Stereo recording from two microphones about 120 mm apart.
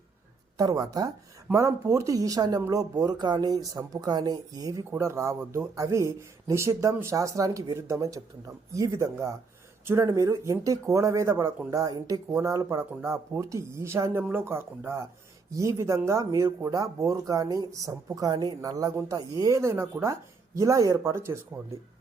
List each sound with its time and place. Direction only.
0.5 s speech: 30° right (ahead or behind)